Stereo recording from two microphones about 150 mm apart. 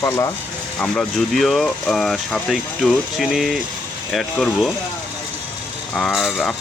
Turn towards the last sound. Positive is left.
turn(degrees=0)  # may be behind; listen again after turning